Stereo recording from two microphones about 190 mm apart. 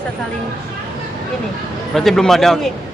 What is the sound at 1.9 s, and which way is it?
Speech, centre (ahead or behind).